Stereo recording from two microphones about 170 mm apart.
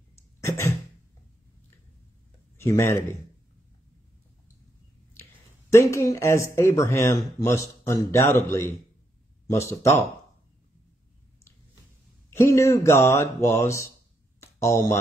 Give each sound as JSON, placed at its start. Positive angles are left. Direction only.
{"t": 0.4, "sound": "cough", "side_deg": 15}
{"t": 2.5, "sound": "speech", "side_deg": 15}
{"t": 5.2, "sound": "a sound", "side_deg": 15}
{"t": 5.7, "sound": "speech", "side_deg": 15}
{"t": 12.3, "sound": "speech", "side_deg": 15}
{"t": 14.4, "sound": "a sound", "side_deg": 15}